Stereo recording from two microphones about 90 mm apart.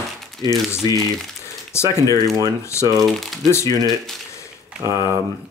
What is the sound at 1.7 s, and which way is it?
Speech, 30° left (ahead or behind).